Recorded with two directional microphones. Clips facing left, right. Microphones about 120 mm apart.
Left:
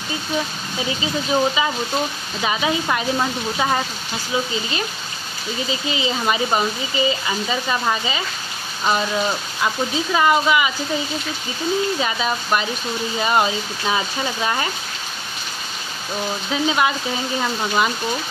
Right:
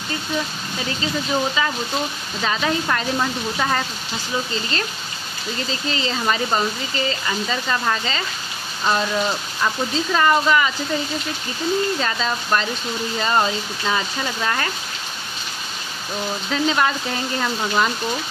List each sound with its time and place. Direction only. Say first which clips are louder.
0.8 s speech: left 1 dB; 15° left (ahead or behind)
12.0 s speech: left 1 dB; 10° left (ahead or behind)
16.4 s speech: even; 10° left (ahead or behind)